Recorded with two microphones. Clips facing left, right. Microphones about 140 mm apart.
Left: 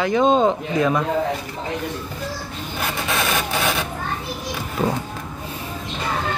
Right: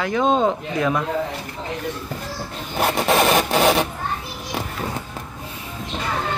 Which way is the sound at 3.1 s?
40° right (ahead or behind).